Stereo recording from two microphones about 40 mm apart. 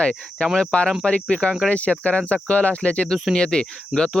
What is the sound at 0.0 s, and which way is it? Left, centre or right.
Speech, left.